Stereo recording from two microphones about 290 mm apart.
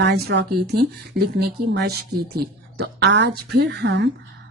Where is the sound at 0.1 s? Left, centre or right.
Right.